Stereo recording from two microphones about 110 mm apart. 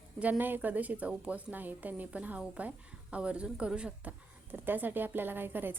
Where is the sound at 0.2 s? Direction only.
15° right (ahead or behind).